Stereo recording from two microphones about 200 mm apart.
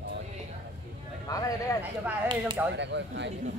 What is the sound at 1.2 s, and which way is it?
Speech, 15° left (ahead or behind).